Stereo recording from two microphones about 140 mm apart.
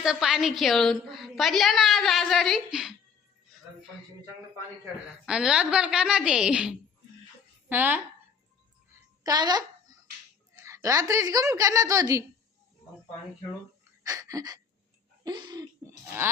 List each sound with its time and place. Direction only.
0.0 s a woman's voice: 5° right (ahead or behind)
5.2 s a woman's voice: 5° right (ahead or behind)
9.2 s a woman's voice: 30° right (ahead or behind)
14.0 s a sound: 25° right (ahead or behind)
15.2 s speech: 30° right (ahead or behind)
15.6 s a sound: 20° right (ahead or behind)